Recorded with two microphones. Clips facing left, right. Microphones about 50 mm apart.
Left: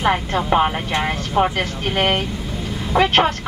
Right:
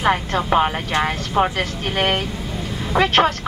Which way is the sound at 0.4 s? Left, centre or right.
Centre.